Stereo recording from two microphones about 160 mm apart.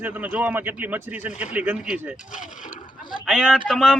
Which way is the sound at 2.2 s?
50° left (ahead or behind).